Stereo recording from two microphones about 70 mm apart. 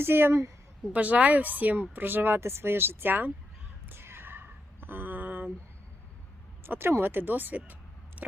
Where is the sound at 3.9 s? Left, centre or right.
Right.